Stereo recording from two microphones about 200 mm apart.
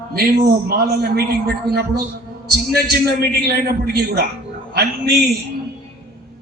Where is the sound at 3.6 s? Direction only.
50° right (ahead or behind).